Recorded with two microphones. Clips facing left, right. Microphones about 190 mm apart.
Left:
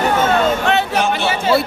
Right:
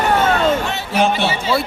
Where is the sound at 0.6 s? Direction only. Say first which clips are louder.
Left 2 dB; 60° left (ahead or behind).